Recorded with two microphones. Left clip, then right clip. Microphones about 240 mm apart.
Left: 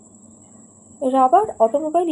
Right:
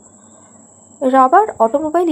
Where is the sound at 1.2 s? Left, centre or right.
Right.